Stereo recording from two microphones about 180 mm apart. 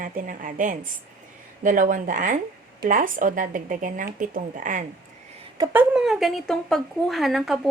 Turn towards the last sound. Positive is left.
turn(degrees=0)  # may be behind; listen again after turning